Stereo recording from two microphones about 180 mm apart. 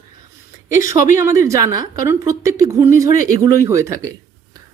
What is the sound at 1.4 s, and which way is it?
Speech, 20° right (ahead or behind).